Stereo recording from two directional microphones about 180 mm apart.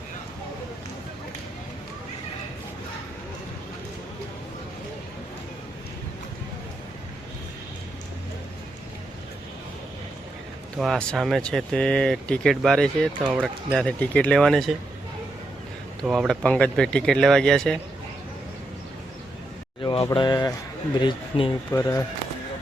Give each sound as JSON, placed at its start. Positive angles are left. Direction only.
{"t": 10.8, "sound": "speech", "side_deg": 0}
{"t": 16.0, "sound": "speech", "side_deg": 0}
{"t": 19.8, "sound": "speech", "side_deg": 25}